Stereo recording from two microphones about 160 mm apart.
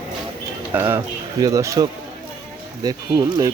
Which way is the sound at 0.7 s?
15° right (ahead or behind).